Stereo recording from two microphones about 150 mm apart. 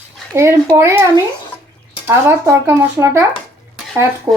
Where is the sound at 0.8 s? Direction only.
15° right (ahead or behind).